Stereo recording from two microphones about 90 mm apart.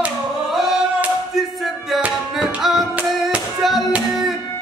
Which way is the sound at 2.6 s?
5° right (ahead or behind).